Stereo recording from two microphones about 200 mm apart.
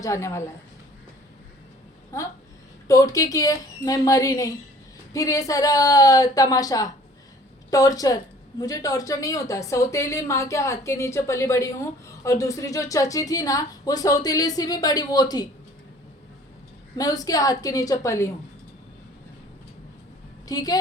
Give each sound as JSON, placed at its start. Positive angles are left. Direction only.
{"t": 0.0, "sound": "speech", "side_deg": 15}
{"t": 2.1, "sound": "speech", "side_deg": 15}
{"t": 17.0, "sound": "speech", "side_deg": 20}
{"t": 20.5, "sound": "a woman's voice", "side_deg": 20}